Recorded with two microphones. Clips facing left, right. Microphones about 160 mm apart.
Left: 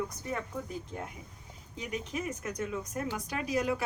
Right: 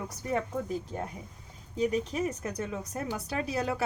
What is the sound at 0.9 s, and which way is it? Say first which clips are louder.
A woman's voice: right 4 dB; 25° right (ahead or behind).